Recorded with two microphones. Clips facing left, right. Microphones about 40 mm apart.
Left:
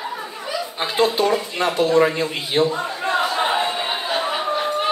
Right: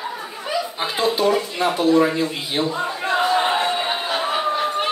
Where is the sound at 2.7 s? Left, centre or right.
Centre.